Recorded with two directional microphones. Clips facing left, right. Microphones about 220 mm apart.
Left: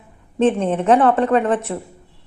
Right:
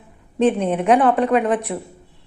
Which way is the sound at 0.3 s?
10° right (ahead or behind).